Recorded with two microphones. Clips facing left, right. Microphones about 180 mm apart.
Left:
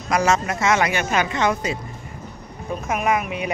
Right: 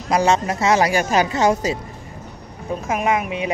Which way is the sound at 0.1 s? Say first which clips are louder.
Right 2 dB; 30° right (ahead or behind).